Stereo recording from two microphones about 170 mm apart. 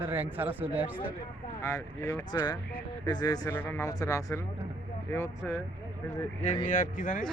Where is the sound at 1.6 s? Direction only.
15° left (ahead or behind).